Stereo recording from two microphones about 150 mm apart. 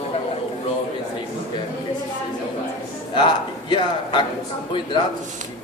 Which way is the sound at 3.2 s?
30° left (ahead or behind).